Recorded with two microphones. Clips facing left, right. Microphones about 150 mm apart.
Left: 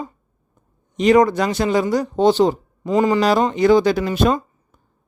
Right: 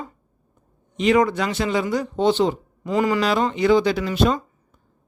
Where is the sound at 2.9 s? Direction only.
25° left (ahead or behind).